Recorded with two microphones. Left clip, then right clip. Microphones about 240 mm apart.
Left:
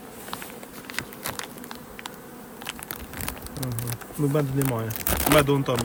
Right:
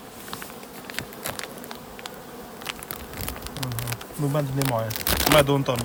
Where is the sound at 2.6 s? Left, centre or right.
Centre.